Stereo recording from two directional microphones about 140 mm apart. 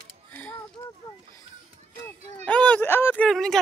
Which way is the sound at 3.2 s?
5° left (ahead or behind).